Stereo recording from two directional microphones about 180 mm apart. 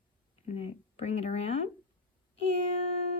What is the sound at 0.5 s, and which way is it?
Speech, 35° left (ahead or behind).